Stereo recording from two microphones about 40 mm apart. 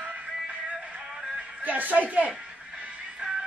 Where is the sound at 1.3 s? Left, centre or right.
Right.